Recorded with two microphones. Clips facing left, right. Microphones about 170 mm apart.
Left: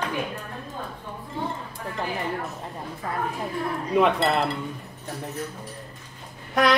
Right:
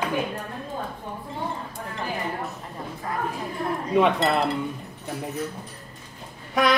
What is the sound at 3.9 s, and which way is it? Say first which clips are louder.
Speech: even; centre (ahead or behind).